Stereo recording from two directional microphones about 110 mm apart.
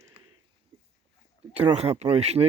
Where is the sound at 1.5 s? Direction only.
65° right (ahead or behind).